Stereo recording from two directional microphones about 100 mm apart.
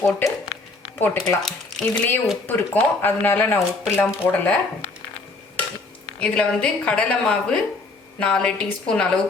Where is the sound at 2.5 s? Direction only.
20° left (ahead or behind).